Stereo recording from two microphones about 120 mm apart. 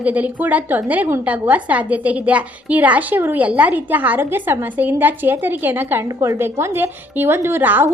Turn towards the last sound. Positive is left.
turn(degrees=-15)  # may be behind; listen again after turning